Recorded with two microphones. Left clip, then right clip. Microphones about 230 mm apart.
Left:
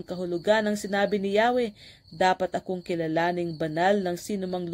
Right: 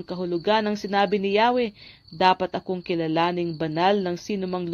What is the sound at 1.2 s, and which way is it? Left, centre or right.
Speech, right.